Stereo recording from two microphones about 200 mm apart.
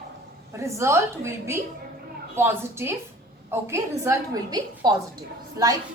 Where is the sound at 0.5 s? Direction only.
15° right (ahead or behind).